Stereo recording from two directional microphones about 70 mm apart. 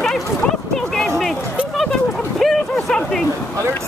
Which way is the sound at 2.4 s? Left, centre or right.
Centre.